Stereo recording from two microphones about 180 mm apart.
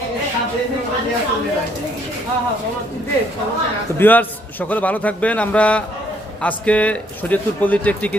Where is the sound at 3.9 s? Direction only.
10° left (ahead or behind).